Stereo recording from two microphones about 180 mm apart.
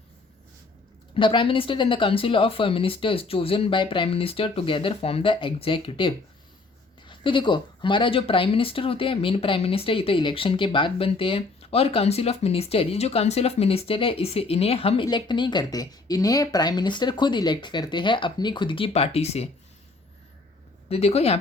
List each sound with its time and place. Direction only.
1.1 s speech: 30° left (ahead or behind)
20.9 s speech: 35° left (ahead or behind)